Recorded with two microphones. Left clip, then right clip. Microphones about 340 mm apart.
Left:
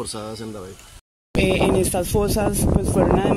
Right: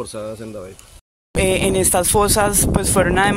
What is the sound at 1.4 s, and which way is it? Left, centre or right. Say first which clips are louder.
Speech: right 1 dB; right.